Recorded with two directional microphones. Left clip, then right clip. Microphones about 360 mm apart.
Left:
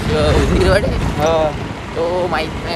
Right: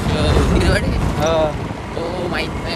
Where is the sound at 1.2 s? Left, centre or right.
Centre.